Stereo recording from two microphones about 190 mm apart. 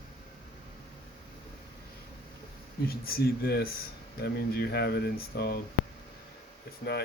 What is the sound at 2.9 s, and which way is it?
Speech, 55° left (ahead or behind).